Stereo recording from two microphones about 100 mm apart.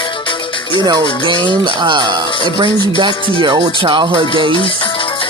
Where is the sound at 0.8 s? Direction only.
50° right (ahead or behind).